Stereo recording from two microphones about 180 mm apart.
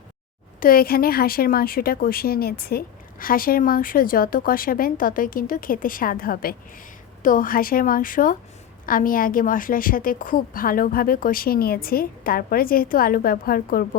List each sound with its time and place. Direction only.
0.6 s a woman's voice: 55° left (ahead or behind)